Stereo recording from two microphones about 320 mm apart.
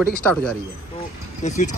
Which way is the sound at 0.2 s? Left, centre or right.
Centre.